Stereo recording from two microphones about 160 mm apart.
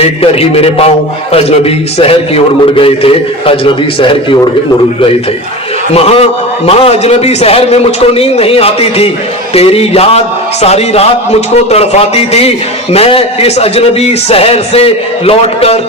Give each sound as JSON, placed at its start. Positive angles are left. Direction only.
{"t": 0.0, "sound": "a man's voice", "side_deg": 40}
{"t": 5.9, "sound": "a man's voice", "side_deg": 40}